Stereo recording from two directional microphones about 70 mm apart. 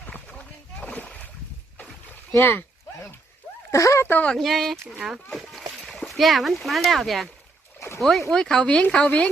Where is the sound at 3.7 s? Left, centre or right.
Left.